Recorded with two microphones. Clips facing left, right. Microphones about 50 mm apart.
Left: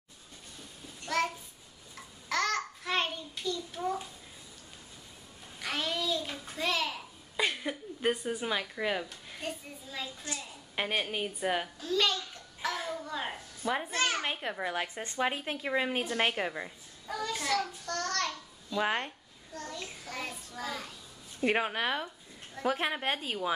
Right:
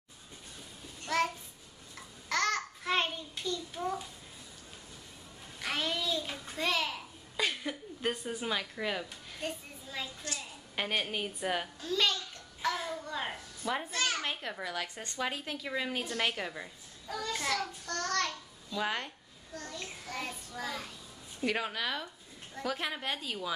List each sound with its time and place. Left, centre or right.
1.0 s child singing: centre
2.0 s babbling: centre
5.6 s a sound: centre
7.3 s a woman's voice: centre
10.3 s a child's voice: centre
10.8 s a child's voice: centre
13.8 s a child's voice: left
14.2 s a child's voice: centre
17.1 s a child's voice: centre
17.4 s child singing: centre
18.7 s speech: left
19.5 s a child's voice: centre
21.5 s speech: left